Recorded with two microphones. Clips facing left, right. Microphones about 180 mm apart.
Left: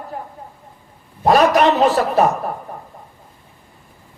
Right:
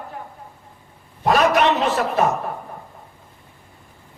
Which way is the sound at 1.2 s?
35° left (ahead or behind).